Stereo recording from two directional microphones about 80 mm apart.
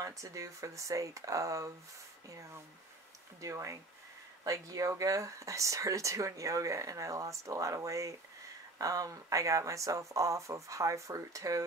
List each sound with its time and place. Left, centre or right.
0.0 s speech: right